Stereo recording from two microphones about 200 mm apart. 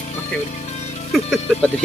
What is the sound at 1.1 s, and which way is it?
Speech, centre (ahead or behind).